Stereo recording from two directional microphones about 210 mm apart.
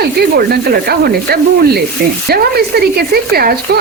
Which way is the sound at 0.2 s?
45° right (ahead or behind).